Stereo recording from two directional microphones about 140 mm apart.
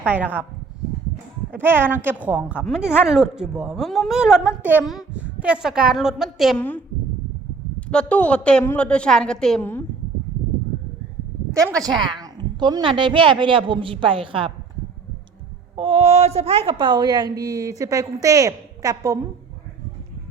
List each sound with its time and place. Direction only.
0.0 s a woman's voice: 10° right (ahead or behind)
1.5 s a woman's voice: 15° right (ahead or behind)
6.6 s a woman's voice: 10° left (ahead or behind)
11.5 s a woman's voice: 25° right (ahead or behind); by 14.5 s 40° right (ahead or behind)
15.7 s a woman's voice: 40° right (ahead or behind); by 19.2 s 25° right (ahead or behind)